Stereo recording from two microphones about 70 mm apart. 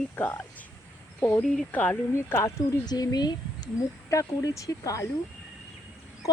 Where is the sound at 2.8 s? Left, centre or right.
Left.